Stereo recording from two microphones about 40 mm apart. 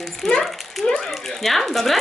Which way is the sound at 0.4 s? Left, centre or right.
Centre.